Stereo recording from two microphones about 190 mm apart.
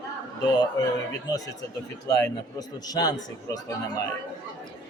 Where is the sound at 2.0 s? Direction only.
20° left (ahead or behind).